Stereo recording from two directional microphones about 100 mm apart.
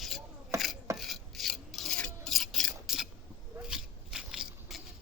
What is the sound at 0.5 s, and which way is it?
Chopping, 30° right (ahead or behind).